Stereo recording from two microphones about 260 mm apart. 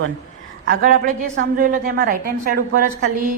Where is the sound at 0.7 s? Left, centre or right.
Right.